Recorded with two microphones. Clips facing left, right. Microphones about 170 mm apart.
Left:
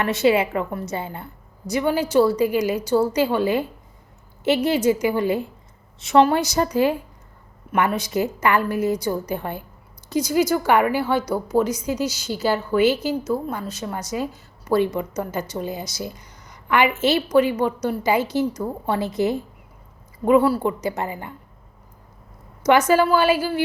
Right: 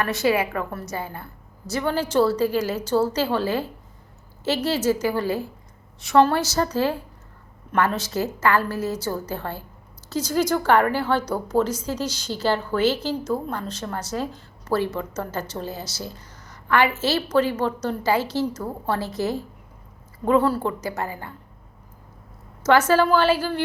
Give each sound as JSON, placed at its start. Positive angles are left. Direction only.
{"t": 0.0, "sound": "a woman's voice", "side_deg": 20}
{"t": 22.9, "sound": "a woman's voice", "side_deg": 10}